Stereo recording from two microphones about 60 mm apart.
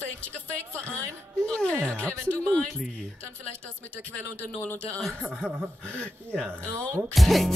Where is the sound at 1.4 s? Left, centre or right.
Centre.